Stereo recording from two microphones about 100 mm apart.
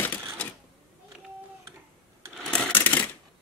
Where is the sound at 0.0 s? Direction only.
15° left (ahead or behind).